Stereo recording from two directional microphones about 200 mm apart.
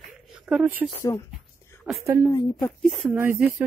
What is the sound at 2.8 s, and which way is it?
Speech, 5° right (ahead or behind).